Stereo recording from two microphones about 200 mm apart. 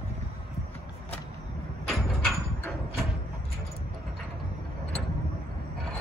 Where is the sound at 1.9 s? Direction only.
Centre (ahead or behind).